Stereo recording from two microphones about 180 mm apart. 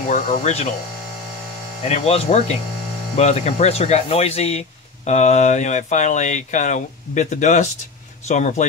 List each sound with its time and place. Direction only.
0.1 s speech: 40° left (ahead or behind)
1.9 s speech: 35° left (ahead or behind)